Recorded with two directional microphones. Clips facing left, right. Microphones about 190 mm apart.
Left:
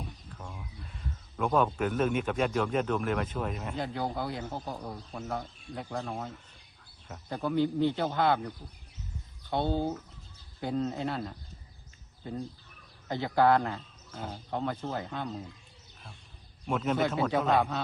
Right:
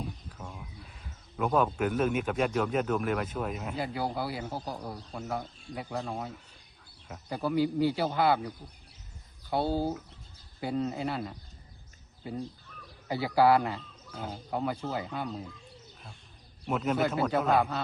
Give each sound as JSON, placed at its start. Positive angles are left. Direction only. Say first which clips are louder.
{"t": 0.0, "sound": "a man's voice", "louder": "right 3 dB", "side_deg": -5}
{"t": 16.6, "sound": "a man's voice", "louder": "even", "side_deg": -5}